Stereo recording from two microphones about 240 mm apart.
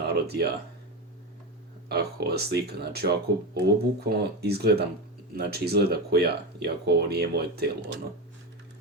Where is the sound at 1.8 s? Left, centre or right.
Right.